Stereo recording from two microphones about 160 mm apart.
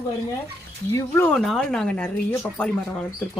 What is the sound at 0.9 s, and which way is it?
Speech, 15° left (ahead or behind).